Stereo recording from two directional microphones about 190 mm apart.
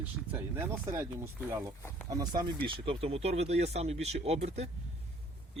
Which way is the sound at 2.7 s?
30° right (ahead or behind).